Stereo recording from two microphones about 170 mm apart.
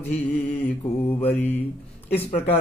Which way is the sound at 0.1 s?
35° left (ahead or behind).